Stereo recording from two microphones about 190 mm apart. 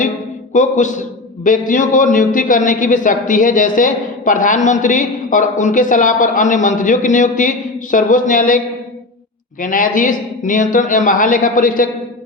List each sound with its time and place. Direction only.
0.5 s a man's voice: 40° left (ahead or behind)